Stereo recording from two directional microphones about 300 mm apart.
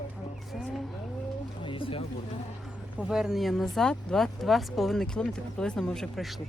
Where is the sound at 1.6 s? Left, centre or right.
Centre.